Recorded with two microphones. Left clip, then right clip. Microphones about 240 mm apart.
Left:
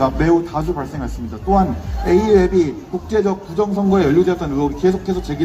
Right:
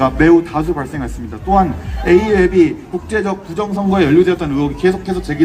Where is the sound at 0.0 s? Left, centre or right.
Right.